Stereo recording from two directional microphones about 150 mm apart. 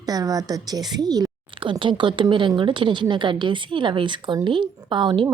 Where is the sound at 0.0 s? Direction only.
25° right (ahead or behind).